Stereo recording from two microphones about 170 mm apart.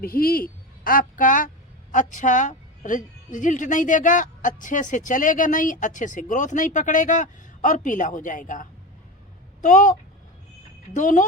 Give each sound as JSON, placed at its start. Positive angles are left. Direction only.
{"t": 0.0, "sound": "a woman's voice", "side_deg": 60}
{"t": 10.9, "sound": "a woman's voice", "side_deg": 45}